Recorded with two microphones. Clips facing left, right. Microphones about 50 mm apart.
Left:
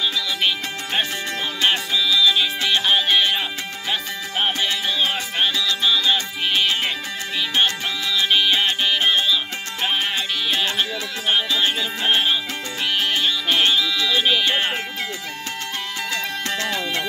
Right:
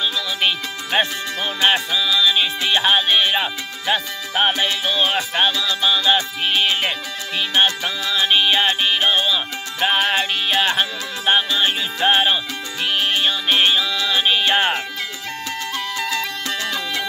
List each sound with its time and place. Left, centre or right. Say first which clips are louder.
0.4 s music: right 1 dB; right
16.4 s music: even; left